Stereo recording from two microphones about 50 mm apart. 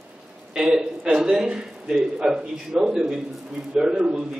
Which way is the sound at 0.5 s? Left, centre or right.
Centre.